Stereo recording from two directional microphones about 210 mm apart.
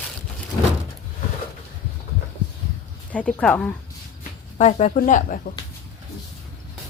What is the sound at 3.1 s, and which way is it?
Speech, 5° left (ahead or behind).